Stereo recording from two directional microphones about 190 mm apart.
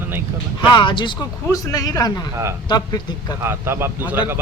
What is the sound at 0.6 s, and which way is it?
Speech, 25° left (ahead or behind).